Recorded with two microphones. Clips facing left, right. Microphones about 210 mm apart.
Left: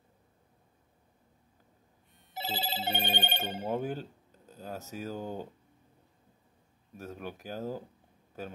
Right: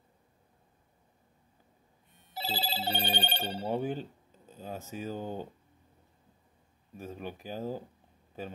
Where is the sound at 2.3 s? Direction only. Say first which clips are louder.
Even; 20° left (ahead or behind).